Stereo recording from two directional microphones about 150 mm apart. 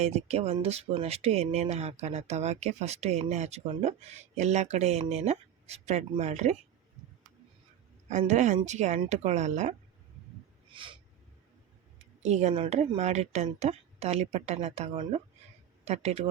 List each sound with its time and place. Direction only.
0.0 s speech: 45° right (ahead or behind)
8.3 s speech: 50° right (ahead or behind)
10.7 s speech: 35° right (ahead or behind)
12.2 s speech: 50° right (ahead or behind)
12.5 s speech: 35° right (ahead or behind)
13.0 s speech: 50° right (ahead or behind)